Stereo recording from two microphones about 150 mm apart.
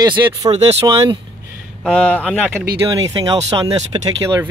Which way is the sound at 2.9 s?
25° right (ahead or behind).